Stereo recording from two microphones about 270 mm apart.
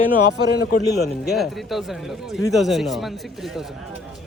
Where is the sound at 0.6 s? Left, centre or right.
Left.